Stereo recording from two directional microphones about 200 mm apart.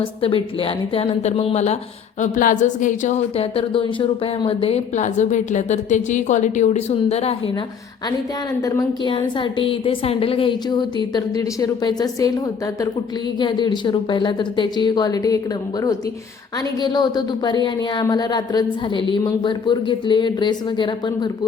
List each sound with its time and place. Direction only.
0.0 s a woman's voice: 25° left (ahead or behind)
8.6 s speech: 20° left (ahead or behind)
13.4 s speech: 20° left (ahead or behind)
16.8 s speech: 20° left (ahead or behind)